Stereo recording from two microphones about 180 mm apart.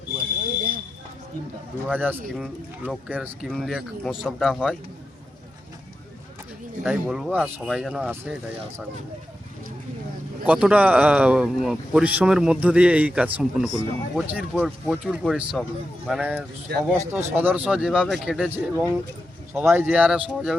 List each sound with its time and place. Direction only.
1.9 s speech: 10° right (ahead or behind)
6.8 s speech: 5° right (ahead or behind)
10.4 s speech: 5° right (ahead or behind)